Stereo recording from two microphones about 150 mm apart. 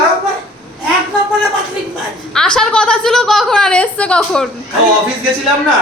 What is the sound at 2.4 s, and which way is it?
A woman's voice, 5° left (ahead or behind).